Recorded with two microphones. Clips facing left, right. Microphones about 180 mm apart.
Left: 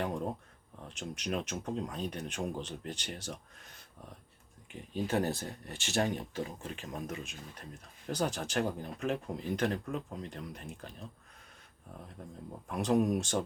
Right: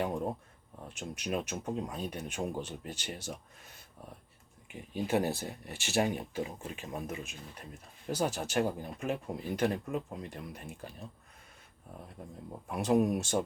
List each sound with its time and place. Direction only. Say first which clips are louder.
0.9 s speech: right 1 dB; 5° right (ahead or behind)
4.7 s speech: right 2 dB; 10° right (ahead or behind)
12.2 s speech: right 1 dB; 10° right (ahead or behind)